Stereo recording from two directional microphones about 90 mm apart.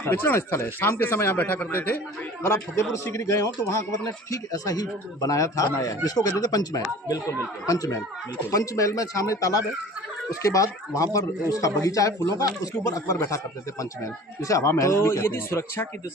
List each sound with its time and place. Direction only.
0.0 s a man's voice: 25° left (ahead or behind)